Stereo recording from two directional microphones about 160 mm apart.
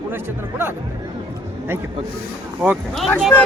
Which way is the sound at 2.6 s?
5° right (ahead or behind).